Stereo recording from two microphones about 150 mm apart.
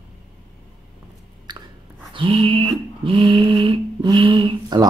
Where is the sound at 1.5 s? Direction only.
30° right (ahead or behind).